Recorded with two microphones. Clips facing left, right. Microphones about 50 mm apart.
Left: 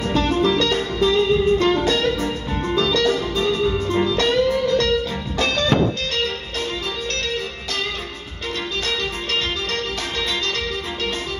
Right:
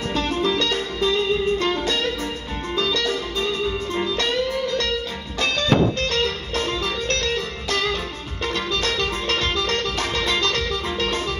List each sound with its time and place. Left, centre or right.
2.7 s music: left
5.9 s music: right
8.5 s music: right